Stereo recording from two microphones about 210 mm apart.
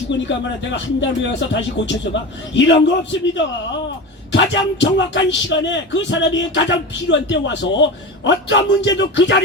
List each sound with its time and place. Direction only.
0.1 s speech: 60° left (ahead or behind)